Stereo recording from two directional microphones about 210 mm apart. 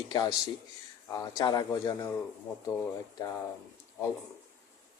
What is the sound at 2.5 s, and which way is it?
Speech, 5° left (ahead or behind).